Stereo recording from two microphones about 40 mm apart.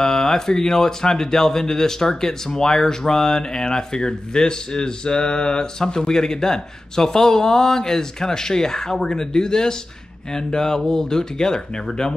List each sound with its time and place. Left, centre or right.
0.0 s speech: centre